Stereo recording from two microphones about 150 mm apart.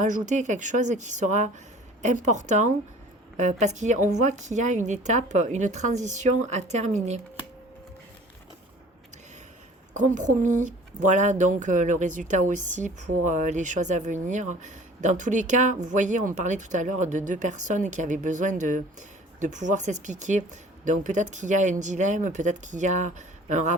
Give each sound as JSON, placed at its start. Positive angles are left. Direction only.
{"t": 0.0, "sound": "a woman's voice", "side_deg": -55}
{"t": 9.9, "sound": "speech", "side_deg": -55}